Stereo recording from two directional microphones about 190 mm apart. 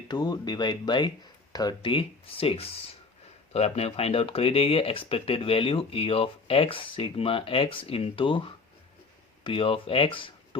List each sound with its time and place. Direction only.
0.1 s speech: 20° left (ahead or behind)